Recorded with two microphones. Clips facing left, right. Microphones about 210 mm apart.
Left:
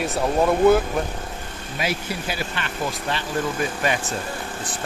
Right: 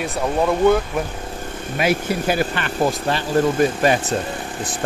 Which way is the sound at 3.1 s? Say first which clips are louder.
Right 7 dB; 40° right (ahead or behind).